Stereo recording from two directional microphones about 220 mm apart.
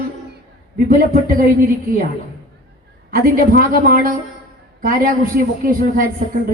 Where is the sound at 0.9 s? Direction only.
40° right (ahead or behind).